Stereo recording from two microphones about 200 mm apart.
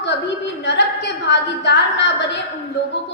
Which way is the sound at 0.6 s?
60° left (ahead or behind).